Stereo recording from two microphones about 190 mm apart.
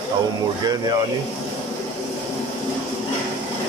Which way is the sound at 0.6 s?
20° right (ahead or behind).